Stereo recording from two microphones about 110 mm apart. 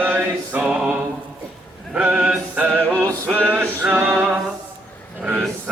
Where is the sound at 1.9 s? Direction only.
10° right (ahead or behind).